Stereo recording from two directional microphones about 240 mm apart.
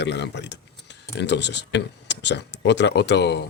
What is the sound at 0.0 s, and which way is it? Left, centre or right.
Speech, left.